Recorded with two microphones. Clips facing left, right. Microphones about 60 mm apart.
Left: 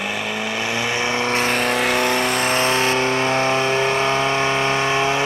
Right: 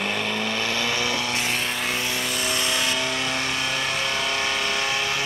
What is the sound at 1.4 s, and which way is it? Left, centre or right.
Vehicle, left.